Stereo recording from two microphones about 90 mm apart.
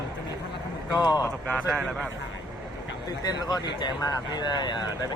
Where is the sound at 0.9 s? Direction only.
50° left (ahead or behind).